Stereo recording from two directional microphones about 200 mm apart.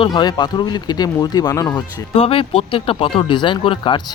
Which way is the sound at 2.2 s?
30° left (ahead or behind).